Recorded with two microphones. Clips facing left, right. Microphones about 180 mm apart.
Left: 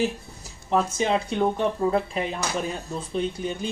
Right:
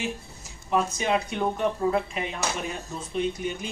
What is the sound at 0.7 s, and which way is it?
Speech, 30° left (ahead or behind).